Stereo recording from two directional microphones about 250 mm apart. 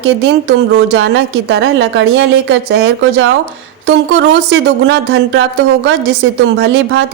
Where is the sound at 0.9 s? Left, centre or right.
Right.